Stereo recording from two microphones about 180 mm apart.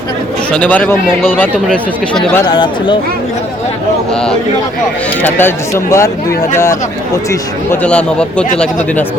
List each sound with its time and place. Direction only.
0.5 s speech: 10° left (ahead or behind)
2.5 s speech: 25° left (ahead or behind)
4.1 s a man's voice: 5° left (ahead or behind)
7.3 s speech: 10° left (ahead or behind)